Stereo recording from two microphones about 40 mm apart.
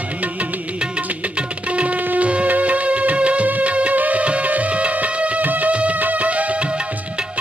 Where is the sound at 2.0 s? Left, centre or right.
Right.